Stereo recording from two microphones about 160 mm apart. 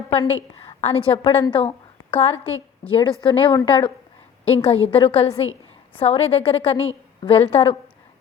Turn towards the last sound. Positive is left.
turn(degrees=35)  # may be behind; listen again after turning